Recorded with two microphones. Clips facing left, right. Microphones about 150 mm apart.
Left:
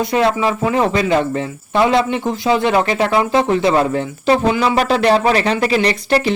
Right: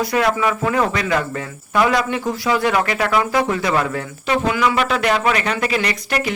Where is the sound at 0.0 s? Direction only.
25° left (ahead or behind).